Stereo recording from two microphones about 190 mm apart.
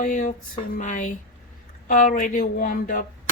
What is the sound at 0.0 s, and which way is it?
Speech, 40° left (ahead or behind).